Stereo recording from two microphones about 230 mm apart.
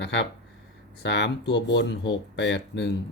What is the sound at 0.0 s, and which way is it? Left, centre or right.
Speech, left.